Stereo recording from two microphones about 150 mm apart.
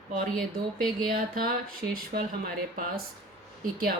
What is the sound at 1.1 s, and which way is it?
Speech, 70° right (ahead or behind).